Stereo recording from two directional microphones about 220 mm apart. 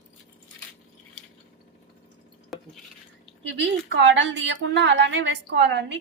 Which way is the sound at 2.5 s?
Centre (ahead or behind).